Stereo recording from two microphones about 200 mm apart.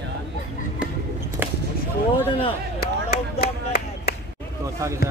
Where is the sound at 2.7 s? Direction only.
50° left (ahead or behind).